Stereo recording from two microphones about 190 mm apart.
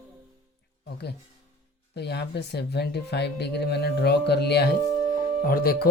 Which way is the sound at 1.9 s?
60° left (ahead or behind).